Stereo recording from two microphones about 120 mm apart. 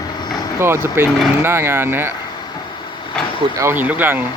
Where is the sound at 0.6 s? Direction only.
20° right (ahead or behind).